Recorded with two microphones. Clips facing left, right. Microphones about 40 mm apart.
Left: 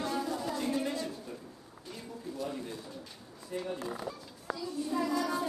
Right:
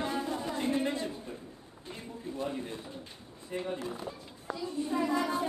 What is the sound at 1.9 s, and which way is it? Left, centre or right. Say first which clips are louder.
A man's voice: right 1 dB; right.